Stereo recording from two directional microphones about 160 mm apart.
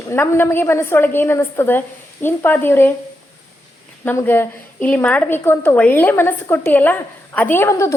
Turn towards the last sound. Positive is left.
turn(degrees=20)  # may be behind; listen again after turning